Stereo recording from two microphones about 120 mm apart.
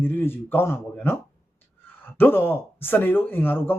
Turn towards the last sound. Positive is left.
turn(degrees=15)  # may be behind; listen again after turning